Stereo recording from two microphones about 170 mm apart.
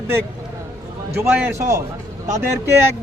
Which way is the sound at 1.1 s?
10° right (ahead or behind).